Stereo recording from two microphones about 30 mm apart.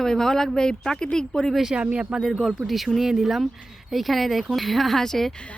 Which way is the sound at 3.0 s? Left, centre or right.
Centre.